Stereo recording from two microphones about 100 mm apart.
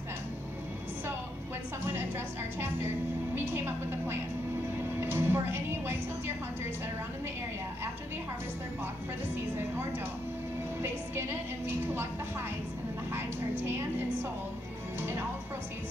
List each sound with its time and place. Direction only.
1.9 s a woman's voice: 25° right (ahead or behind)
5.0 s music: 25° right (ahead or behind)
10.8 s a woman's voice: 25° right (ahead or behind)
13.7 s a woman's voice: 20° right (ahead or behind)